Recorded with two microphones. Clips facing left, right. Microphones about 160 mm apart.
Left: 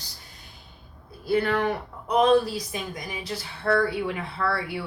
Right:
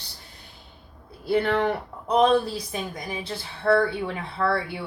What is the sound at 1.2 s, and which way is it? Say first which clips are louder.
Speech: right 1 dB; 25° right (ahead or behind).